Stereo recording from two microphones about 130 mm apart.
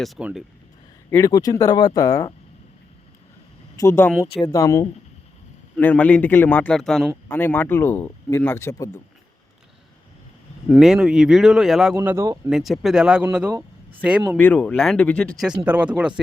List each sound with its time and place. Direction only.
0.2 s speech: 10° right (ahead or behind)
1.1 s speech: 25° left (ahead or behind)
3.8 s speech: 20° left (ahead or behind)
5.7 s speech: 10° left (ahead or behind)
7.3 s speech: 15° left (ahead or behind)
10.7 s speech: 5° right (ahead or behind)
11.9 s speech: 20° right (ahead or behind)
12.5 s speech: centre (ahead or behind)
14.3 s speech: 10° left (ahead or behind)
15.6 s speech: 15° right (ahead or behind)